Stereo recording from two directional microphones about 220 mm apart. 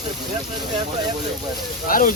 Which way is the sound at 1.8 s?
40° left (ahead or behind).